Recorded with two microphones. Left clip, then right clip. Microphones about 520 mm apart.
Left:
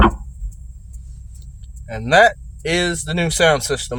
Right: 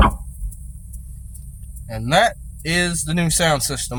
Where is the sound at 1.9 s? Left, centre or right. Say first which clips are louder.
Left 4 dB; right.